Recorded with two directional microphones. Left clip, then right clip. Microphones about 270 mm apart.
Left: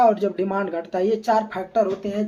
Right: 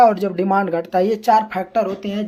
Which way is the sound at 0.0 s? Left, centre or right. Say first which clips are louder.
Right 4 dB; right.